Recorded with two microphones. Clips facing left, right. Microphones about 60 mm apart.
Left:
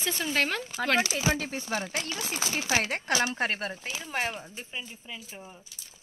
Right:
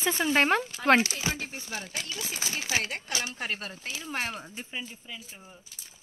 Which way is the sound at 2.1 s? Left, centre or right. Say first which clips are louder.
Left 1 dB; left.